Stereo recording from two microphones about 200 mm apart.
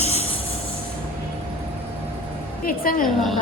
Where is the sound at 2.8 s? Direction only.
45° left (ahead or behind).